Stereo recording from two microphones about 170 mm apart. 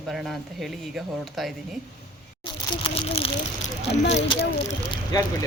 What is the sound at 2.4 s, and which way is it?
Speech, 35° left (ahead or behind).